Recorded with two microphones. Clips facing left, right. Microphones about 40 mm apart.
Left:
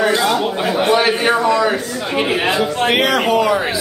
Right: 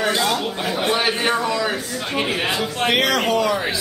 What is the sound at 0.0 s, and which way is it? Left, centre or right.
A man's voice, centre.